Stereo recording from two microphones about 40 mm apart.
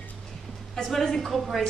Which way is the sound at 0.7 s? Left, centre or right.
Centre.